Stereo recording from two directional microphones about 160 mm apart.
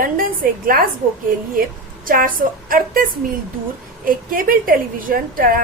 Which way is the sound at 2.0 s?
60° right (ahead or behind).